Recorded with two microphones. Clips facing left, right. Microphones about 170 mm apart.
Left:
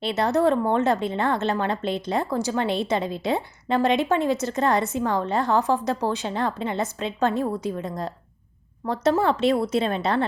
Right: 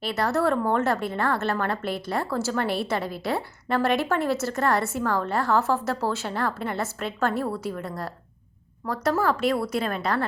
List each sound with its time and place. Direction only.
0.0 s a woman's voice: 20° left (ahead or behind)